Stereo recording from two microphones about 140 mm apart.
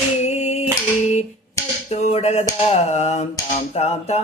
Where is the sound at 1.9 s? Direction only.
55° left (ahead or behind).